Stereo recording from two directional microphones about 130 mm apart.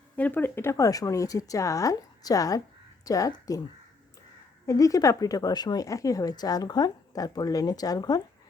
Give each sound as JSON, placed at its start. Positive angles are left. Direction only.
{"t": 0.2, "sound": "speech", "side_deg": 15}
{"t": 4.6, "sound": "speech", "side_deg": 25}